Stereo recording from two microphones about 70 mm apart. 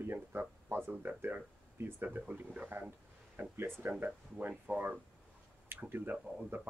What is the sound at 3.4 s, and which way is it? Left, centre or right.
Speech, right.